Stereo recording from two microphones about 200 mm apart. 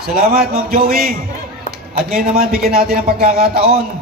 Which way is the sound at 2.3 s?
50° right (ahead or behind).